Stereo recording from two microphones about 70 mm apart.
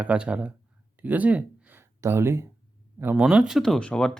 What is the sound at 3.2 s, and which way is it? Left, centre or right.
Speech, centre.